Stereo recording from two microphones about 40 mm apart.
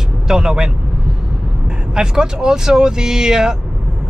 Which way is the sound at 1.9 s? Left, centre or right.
Centre.